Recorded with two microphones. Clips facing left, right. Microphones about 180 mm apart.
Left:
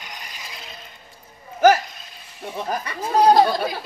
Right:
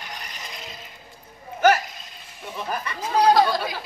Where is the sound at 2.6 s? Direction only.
40° left (ahead or behind).